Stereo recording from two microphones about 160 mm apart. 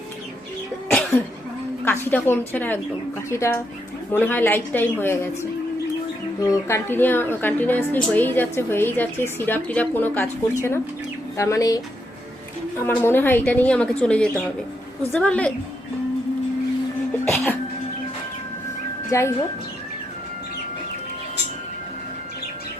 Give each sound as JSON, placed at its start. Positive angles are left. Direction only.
{"t": 1.8, "sound": "a woman's voice", "side_deg": 10}
{"t": 12.8, "sound": "a woman's voice", "side_deg": 15}
{"t": 17.2, "sound": "music", "side_deg": 0}
{"t": 19.1, "sound": "speech", "side_deg": 20}